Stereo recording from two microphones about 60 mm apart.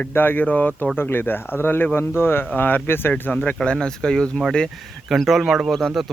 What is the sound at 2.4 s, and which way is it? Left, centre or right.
Speech, left.